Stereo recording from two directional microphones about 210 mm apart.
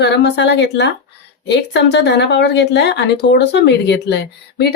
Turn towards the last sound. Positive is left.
turn(degrees=55)  # may be behind; listen again after turning